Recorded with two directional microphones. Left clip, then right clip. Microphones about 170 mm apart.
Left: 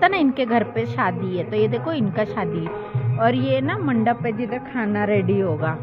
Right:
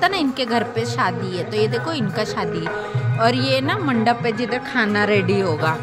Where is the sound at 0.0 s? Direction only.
5° left (ahead or behind); by 5.8 s 15° right (ahead or behind).